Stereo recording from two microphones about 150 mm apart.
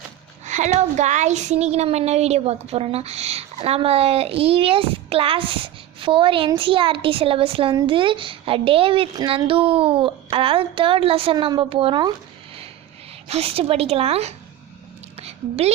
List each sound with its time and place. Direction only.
0.4 s a child's voice: 50° right (ahead or behind); by 12.1 s 30° right (ahead or behind)
13.2 s a child's voice: 40° right (ahead or behind)
15.1 s a sound: 40° right (ahead or behind)